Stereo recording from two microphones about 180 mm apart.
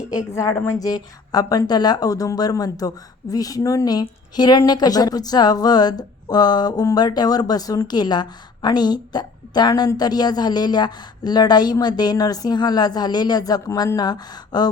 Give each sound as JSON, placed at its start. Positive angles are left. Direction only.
{"t": 0.3, "sound": "speech", "side_deg": 15}